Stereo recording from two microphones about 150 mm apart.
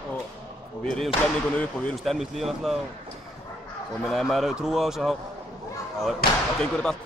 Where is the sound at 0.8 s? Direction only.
5° left (ahead or behind).